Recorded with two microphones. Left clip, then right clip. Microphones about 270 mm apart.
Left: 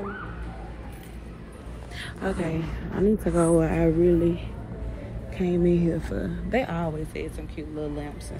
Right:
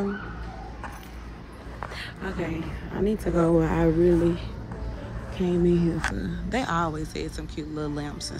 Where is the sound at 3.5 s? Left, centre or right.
Centre.